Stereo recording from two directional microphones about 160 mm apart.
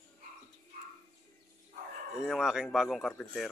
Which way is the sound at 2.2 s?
5° right (ahead or behind).